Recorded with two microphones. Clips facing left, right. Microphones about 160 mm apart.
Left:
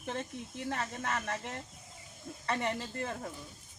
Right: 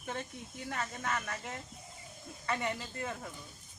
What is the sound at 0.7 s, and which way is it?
Speech, 30° left (ahead or behind).